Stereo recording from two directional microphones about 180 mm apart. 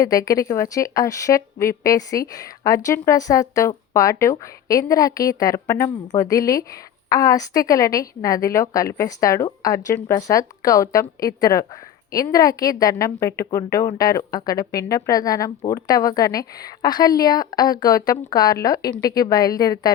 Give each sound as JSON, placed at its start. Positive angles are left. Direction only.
{"t": 0.0, "sound": "a woman's voice", "side_deg": 20}